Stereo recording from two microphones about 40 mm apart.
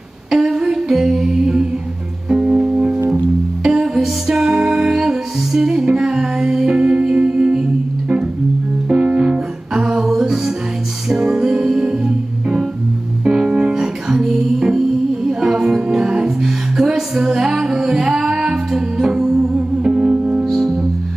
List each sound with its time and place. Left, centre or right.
0.3 s humming: centre
2.2 s music: right
9.8 s music: centre
20.4 s music: centre